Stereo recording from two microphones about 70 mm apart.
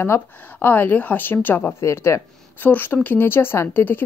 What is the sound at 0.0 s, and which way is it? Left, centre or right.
A woman's voice, left.